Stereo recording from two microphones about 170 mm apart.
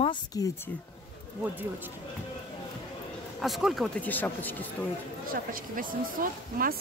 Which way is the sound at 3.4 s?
Centre (ahead or behind).